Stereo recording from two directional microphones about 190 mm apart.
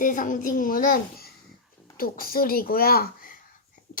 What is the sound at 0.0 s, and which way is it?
A child's voice, 45° left (ahead or behind).